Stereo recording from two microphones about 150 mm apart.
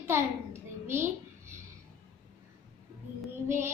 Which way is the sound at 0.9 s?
15° right (ahead or behind).